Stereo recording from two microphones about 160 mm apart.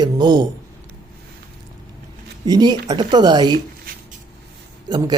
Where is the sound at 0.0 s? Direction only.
25° right (ahead or behind).